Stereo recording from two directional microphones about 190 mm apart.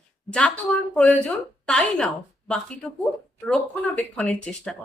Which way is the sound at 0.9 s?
5° left (ahead or behind).